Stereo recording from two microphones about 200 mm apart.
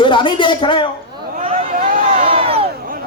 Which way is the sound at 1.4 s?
30° right (ahead or behind).